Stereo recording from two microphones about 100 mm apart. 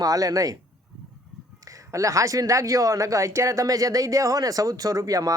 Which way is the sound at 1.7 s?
35° right (ahead or behind).